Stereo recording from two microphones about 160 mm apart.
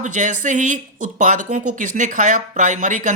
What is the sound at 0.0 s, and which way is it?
Speech, 50° right (ahead or behind).